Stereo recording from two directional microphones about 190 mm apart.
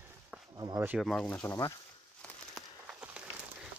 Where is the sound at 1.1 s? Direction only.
5° left (ahead or behind).